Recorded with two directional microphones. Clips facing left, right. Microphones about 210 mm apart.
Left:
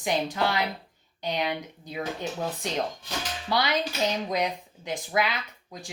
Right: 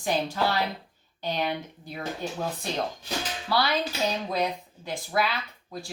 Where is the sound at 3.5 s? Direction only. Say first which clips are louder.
Right 1 dB; 20° left (ahead or behind).